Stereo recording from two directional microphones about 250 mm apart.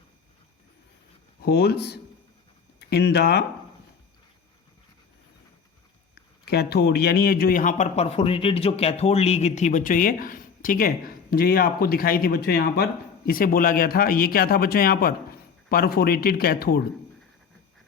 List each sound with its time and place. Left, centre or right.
1.4 s speech: left
6.1 s speech: left